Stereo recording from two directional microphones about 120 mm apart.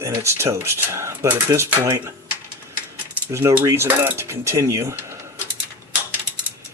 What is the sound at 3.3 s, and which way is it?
Speech, 20° right (ahead or behind).